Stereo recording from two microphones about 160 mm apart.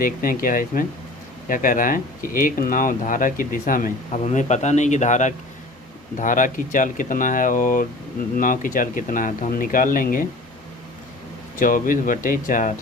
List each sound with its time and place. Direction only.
0.0 s speech: 60° left (ahead or behind)
4.2 s a man's voice: 45° left (ahead or behind)
11.5 s speech: 55° left (ahead or behind)